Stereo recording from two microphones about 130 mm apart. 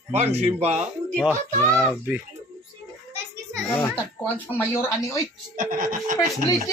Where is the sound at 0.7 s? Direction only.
5° right (ahead or behind).